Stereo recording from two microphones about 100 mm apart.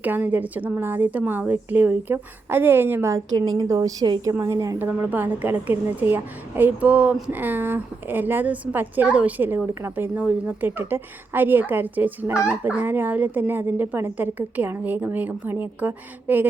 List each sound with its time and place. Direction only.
0.0 s a woman's voice: 15° right (ahead or behind)
3.3 s a woman's voice: 40° right (ahead or behind)
4.8 s a woman's voice: 20° right (ahead or behind)